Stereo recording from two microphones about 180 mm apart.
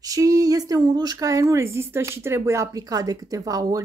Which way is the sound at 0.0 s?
20° right (ahead or behind).